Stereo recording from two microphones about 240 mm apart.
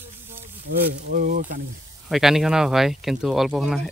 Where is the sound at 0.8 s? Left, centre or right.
Right.